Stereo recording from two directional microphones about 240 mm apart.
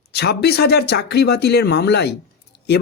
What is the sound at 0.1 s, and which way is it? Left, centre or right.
Speech, left.